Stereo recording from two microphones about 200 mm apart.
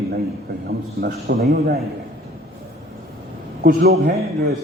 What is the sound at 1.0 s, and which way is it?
Speech, 50° right (ahead or behind).